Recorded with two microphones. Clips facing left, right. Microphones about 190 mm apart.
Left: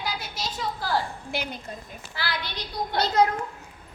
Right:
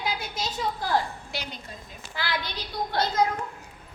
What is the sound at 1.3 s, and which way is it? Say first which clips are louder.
Speech: left 7 dB; 55° left (ahead or behind).